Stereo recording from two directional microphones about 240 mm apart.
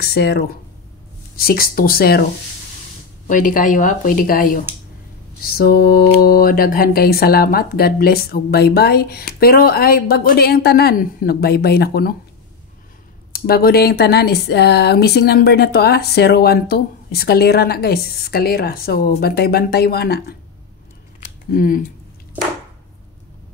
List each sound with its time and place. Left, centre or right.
0.0 s speech: left
3.3 s speech: left
13.3 s speech: left
21.5 s speech: left